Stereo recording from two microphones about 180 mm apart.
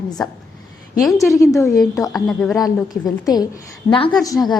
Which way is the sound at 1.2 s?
15° left (ahead or behind).